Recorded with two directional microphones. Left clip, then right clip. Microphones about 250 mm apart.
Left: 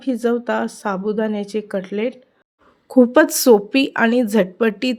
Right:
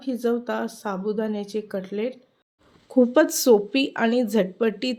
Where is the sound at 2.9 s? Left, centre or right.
Left.